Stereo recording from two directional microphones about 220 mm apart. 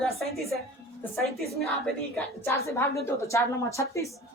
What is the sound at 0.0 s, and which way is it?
Music, centre (ahead or behind).